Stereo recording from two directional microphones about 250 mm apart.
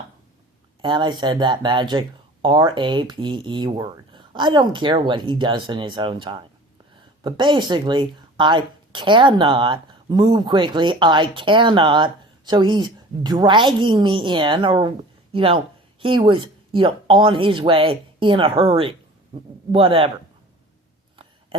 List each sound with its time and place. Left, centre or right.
0.8 s speech: centre